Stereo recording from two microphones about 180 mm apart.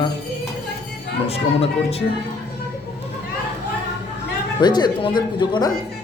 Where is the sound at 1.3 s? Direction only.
35° left (ahead or behind).